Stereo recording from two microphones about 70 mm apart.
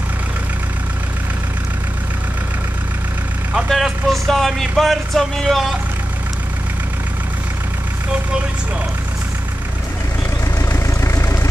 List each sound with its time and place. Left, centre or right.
3.6 s speech: centre
10.6 s vehicle: left